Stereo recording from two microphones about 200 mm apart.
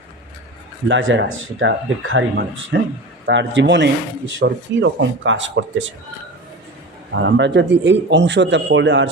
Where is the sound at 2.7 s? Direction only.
60° right (ahead or behind).